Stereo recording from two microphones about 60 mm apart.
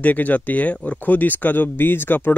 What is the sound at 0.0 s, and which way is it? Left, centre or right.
Speech, left.